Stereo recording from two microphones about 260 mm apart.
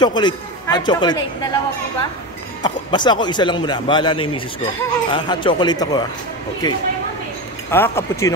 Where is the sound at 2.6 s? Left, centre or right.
Centre.